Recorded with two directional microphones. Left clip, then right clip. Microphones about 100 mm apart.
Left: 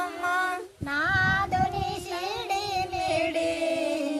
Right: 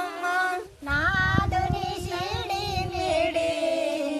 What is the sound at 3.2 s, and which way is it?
Music, 25° left (ahead or behind).